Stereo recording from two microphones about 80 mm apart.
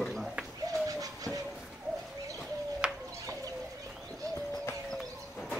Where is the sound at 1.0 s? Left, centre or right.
Right.